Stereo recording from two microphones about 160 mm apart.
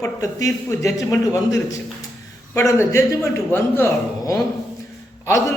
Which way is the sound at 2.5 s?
15° left (ahead or behind).